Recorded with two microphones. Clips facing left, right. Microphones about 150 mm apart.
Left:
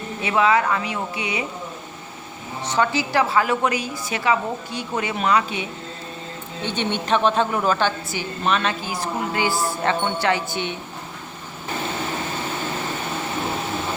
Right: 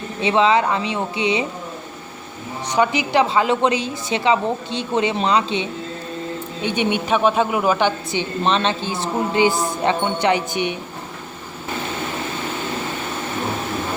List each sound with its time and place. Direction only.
0.2 s a woman's voice: 25° right (ahead or behind)
2.6 s a woman's voice: 15° right (ahead or behind)
6.6 s a woman's voice: 15° right (ahead or behind)